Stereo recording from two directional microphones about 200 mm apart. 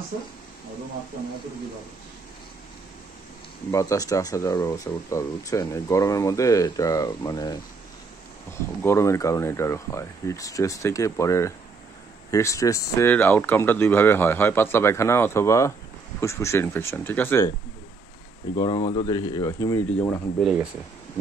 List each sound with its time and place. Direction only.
3.7 s speech: 15° left (ahead or behind)
8.5 s speech: 15° left (ahead or behind)
18.6 s speech: 25° left (ahead or behind)